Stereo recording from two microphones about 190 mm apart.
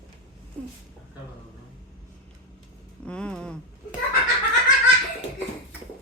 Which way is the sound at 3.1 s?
5° left (ahead or behind).